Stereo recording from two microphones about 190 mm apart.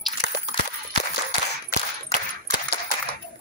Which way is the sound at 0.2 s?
65° left (ahead or behind).